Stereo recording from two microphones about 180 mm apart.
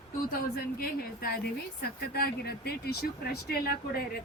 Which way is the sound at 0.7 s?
55° left (ahead or behind).